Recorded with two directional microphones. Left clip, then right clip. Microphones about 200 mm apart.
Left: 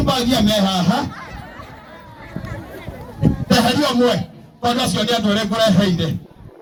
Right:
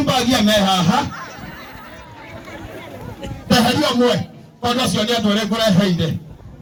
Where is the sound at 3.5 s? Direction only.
30° right (ahead or behind).